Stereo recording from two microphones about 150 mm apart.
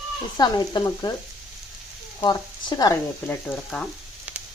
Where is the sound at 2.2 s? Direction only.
25° left (ahead or behind).